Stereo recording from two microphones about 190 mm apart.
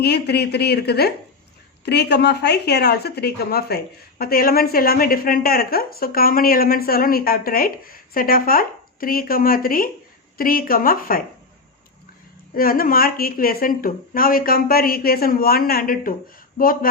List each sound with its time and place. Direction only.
0.0 s a woman's voice: 60° left (ahead or behind)
12.5 s a woman's voice: 50° left (ahead or behind)